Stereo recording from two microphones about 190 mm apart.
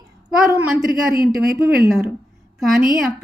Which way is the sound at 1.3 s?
Centre (ahead or behind).